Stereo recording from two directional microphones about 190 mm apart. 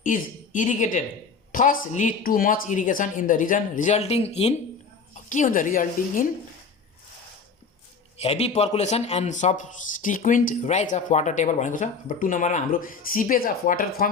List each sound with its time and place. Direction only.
0.0 s a woman's voice: 45° left (ahead or behind)
8.2 s a man's voice: 35° left (ahead or behind)